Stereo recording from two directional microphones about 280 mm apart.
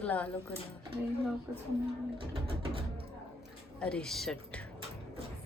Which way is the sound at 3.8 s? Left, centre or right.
Centre.